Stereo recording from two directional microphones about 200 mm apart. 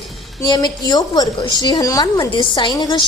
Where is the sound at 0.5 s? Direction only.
20° left (ahead or behind).